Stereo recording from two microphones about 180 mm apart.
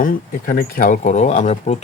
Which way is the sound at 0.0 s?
50° left (ahead or behind).